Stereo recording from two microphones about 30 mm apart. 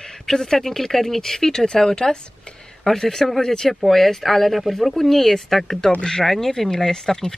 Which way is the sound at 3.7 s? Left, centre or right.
Centre.